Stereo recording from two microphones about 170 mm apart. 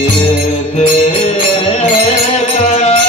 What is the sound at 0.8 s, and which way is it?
Music, 35° left (ahead or behind).